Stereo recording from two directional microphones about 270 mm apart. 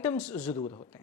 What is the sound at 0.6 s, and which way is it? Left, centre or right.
Speech, left.